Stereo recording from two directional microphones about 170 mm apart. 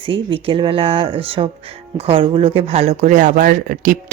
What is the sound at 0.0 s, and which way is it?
Speech, 30° right (ahead or behind).